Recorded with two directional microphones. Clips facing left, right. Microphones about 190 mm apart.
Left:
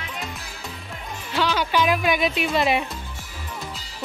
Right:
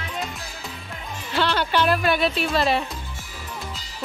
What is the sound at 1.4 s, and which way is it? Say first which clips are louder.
Speech: even; 10° left (ahead or behind).